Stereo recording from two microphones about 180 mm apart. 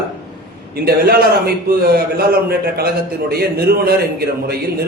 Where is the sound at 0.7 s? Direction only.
60° right (ahead or behind).